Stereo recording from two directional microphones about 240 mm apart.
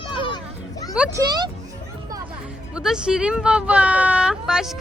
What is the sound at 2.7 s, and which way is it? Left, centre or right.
Speech, centre.